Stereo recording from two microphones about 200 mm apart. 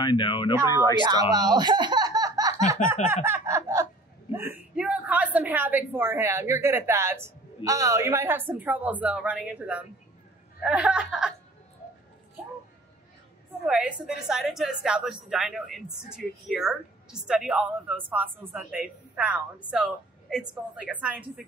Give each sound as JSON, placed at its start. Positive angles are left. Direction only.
{"t": 0.0, "sound": "speech", "side_deg": 25}
{"t": 1.3, "sound": "speech", "side_deg": -20}
{"t": 3.3, "sound": "a sound", "side_deg": -15}
{"t": 4.3, "sound": "a woman's voice", "side_deg": -10}
{"t": 13.7, "sound": "a woman's voice", "side_deg": -5}